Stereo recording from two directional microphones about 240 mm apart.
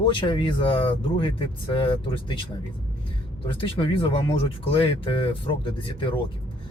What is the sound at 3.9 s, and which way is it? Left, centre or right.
Speech, left.